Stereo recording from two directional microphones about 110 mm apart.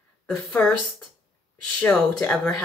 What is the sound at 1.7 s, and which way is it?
Speech, 15° left (ahead or behind).